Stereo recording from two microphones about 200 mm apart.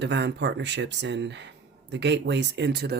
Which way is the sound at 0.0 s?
60° right (ahead or behind).